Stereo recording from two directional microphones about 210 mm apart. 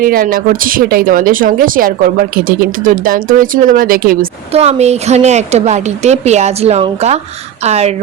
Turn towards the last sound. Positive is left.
turn(degrees=-30)  # may be behind; listen again after turning